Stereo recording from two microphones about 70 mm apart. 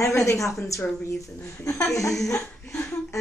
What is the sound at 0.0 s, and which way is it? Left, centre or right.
Speech, left.